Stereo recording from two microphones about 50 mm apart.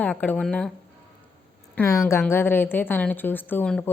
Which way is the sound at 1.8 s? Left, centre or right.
Left.